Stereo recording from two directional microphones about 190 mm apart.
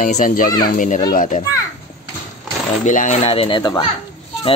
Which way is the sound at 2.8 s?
40° left (ahead or behind).